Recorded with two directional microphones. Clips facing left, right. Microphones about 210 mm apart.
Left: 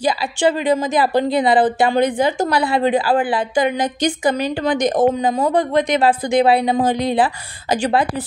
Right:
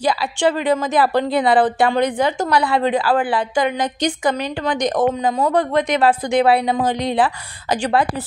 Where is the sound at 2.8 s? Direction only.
20° left (ahead or behind).